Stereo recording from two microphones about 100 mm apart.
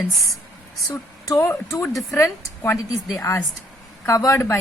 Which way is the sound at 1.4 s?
25° left (ahead or behind).